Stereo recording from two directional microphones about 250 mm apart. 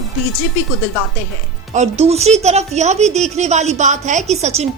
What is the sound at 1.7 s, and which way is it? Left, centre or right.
A woman's voice, right.